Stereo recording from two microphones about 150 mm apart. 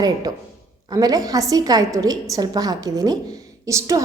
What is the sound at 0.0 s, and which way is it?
A woman's voice, 25° right (ahead or behind).